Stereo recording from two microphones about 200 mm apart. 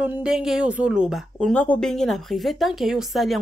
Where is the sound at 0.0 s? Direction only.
5° right (ahead or behind).